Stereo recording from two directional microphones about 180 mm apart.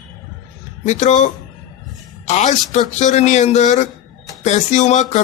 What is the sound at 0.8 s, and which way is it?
Speech, 40° left (ahead or behind).